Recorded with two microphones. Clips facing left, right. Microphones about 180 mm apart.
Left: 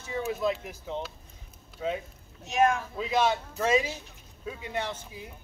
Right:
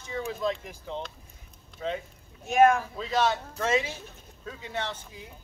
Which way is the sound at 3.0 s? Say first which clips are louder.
Even; 10° left (ahead or behind).